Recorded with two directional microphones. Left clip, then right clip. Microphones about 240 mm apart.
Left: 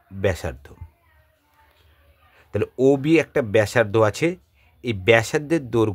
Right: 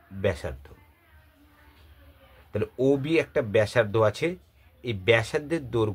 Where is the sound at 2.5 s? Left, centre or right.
Left.